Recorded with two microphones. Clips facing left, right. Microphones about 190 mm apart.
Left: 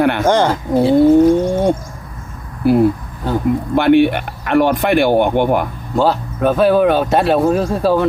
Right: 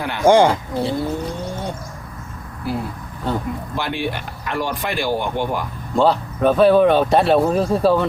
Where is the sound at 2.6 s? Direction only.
60° left (ahead or behind).